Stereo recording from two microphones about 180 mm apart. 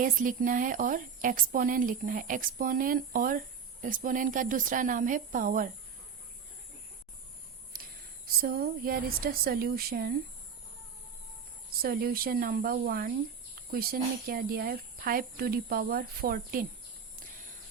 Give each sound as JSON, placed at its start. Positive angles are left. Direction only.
{"t": 0.0, "sound": "speech", "side_deg": -50}
{"t": 7.7, "sound": "whispering", "side_deg": -55}
{"t": 8.4, "sound": "speech", "side_deg": -55}
{"t": 11.8, "sound": "speech", "side_deg": -55}